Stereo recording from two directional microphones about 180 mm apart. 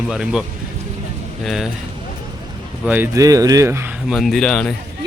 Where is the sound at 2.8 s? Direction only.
10° right (ahead or behind); by 4.7 s 5° left (ahead or behind).